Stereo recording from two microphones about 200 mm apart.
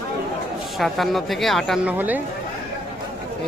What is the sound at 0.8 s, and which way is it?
A woman's voice, centre (ahead or behind).